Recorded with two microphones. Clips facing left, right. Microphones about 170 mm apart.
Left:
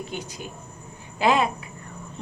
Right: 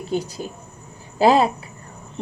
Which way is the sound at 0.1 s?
35° right (ahead or behind).